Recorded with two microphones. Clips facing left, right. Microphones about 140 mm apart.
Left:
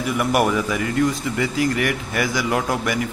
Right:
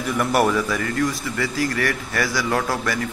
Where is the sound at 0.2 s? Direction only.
10° left (ahead or behind).